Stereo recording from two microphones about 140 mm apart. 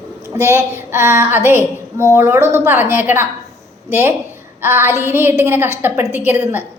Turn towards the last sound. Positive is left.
turn(degrees=-15)  # may be behind; listen again after turning